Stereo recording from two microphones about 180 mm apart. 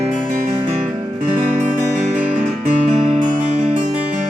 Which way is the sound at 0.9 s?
20° right (ahead or behind).